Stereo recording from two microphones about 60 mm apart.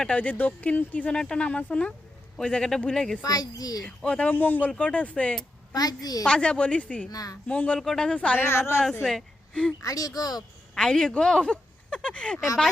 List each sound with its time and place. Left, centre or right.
0.2 s speech: left; by 3.2 s centre
3.2 s speech: left
3.8 s speech: centre
4.4 s speech: left
4.8 s speech: left
5.7 s speech: left
6.2 s speech: centre
7.1 s speech: left
7.4 s speech: centre
8.4 s speech: left
9.5 s speech: centre
9.8 s speech: left
10.8 s speech: centre